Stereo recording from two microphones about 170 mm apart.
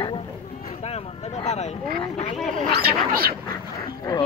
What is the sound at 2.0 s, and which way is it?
Speech, 30° left (ahead or behind).